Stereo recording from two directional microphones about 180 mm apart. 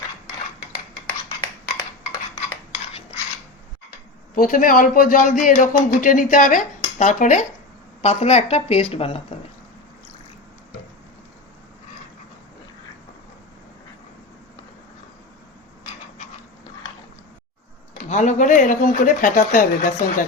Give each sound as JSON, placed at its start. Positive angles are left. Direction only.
{"t": 4.4, "sound": "a man's voice", "side_deg": 50}
{"t": 18.1, "sound": "a man's voice", "side_deg": 40}